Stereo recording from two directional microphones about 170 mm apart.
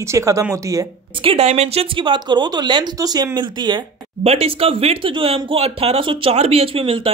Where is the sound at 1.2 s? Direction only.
35° right (ahead or behind).